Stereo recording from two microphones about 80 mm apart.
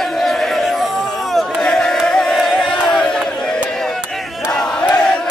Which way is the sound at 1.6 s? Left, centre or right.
Centre.